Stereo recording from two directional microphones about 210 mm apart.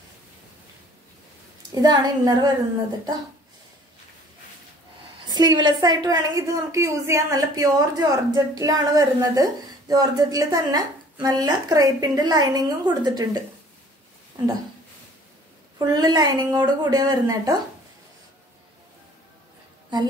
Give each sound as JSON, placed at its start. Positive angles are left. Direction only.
{"t": 1.8, "sound": "a woman's voice", "side_deg": -20}
{"t": 5.2, "sound": "a woman's voice", "side_deg": -20}
{"t": 15.8, "sound": "a woman's voice", "side_deg": -20}